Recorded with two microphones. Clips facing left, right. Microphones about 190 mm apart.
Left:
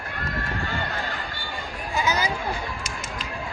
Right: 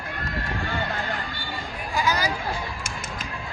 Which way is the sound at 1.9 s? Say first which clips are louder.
Even; 20° left (ahead or behind).